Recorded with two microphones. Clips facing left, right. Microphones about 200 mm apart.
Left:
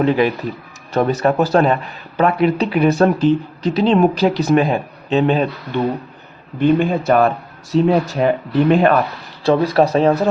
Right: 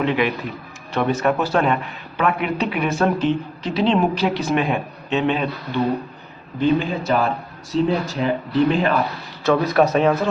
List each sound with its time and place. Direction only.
0.0 s a man's voice: 40° left (ahead or behind)
6.6 s a man's voice: 55° left (ahead or behind)
9.4 s a man's voice: 30° left (ahead or behind)